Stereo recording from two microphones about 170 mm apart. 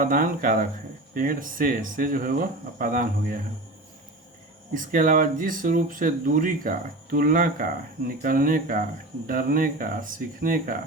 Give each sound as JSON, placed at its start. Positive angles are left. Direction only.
{"t": 0.0, "sound": "speech", "side_deg": -55}
{"t": 4.7, "sound": "speech", "side_deg": -55}